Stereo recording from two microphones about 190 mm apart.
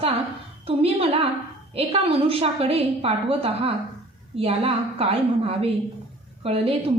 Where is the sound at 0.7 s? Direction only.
30° right (ahead or behind).